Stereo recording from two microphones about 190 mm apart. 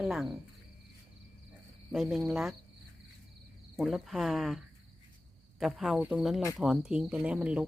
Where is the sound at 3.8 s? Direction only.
Centre (ahead or behind).